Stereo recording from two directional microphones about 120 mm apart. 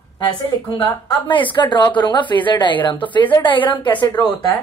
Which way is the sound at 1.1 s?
45° left (ahead or behind).